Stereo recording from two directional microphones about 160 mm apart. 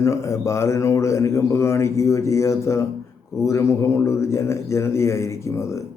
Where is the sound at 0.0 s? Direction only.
20° left (ahead or behind).